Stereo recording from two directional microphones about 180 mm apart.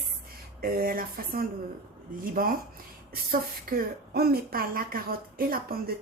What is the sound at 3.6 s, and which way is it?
Speech, 55° right (ahead or behind).